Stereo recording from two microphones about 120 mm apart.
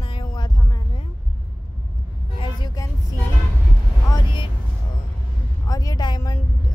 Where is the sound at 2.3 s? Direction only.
30° left (ahead or behind).